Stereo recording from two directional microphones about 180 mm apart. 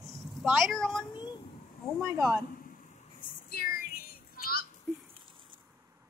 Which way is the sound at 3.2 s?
60° left (ahead or behind).